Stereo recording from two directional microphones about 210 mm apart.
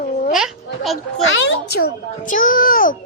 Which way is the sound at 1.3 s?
50° left (ahead or behind).